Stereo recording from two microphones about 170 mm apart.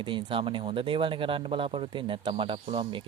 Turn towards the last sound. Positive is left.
turn(degrees=-30)  # may be behind; listen again after turning